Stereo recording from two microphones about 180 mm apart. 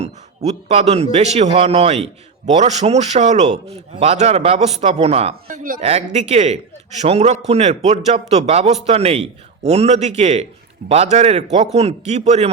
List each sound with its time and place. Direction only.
0.0 s a man's voice: 35° right (ahead or behind)